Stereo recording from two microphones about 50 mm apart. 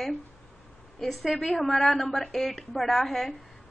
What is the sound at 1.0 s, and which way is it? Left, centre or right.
A woman's voice, centre.